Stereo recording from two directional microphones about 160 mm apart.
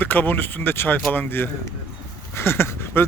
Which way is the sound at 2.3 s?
15° left (ahead or behind).